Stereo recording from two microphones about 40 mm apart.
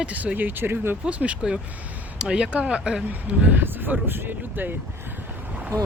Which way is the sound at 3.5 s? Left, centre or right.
Right.